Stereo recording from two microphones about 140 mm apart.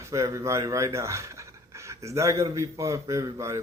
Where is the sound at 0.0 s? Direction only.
20° right (ahead or behind).